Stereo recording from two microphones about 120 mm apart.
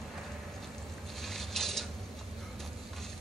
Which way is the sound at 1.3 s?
Centre (ahead or behind).